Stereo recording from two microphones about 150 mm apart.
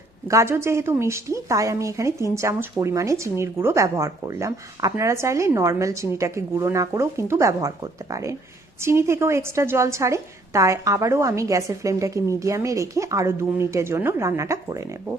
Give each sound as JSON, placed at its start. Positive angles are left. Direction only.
{"t": 0.3, "sound": "a woman's voice", "side_deg": -20}